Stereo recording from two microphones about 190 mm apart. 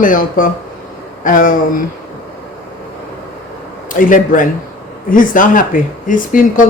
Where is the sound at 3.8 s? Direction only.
45° left (ahead or behind).